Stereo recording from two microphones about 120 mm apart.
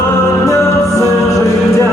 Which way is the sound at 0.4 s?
30° left (ahead or behind).